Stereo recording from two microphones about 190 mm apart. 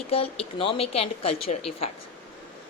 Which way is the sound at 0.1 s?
30° left (ahead or behind).